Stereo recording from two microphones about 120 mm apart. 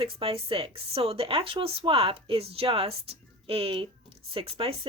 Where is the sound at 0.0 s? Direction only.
50° right (ahead or behind).